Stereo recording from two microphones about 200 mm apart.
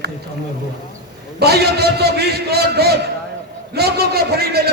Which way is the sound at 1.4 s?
55° right (ahead or behind).